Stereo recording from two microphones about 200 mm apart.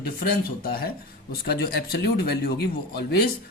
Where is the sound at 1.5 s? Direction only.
50° left (ahead or behind).